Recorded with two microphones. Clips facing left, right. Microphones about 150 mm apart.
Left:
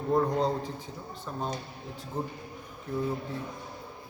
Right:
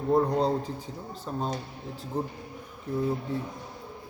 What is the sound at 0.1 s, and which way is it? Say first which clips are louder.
Speech: right 2 dB; 10° right (ahead or behind).